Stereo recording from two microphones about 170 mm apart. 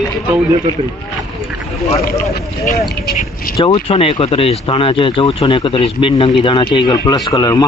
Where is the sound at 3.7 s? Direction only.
35° left (ahead or behind).